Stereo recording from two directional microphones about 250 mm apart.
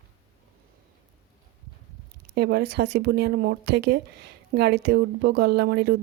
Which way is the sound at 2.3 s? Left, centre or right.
Right.